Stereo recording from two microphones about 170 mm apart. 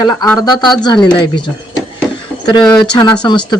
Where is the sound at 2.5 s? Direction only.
25° left (ahead or behind).